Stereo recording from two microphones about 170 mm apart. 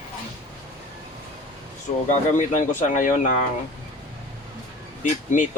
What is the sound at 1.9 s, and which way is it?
Speech, 45° left (ahead or behind).